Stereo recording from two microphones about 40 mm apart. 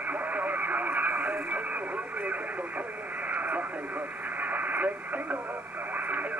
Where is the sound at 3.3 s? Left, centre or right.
Right.